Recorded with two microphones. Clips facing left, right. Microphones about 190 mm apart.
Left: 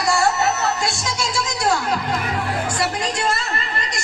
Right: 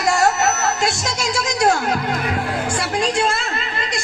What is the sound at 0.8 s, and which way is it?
Music, 45° right (ahead or behind).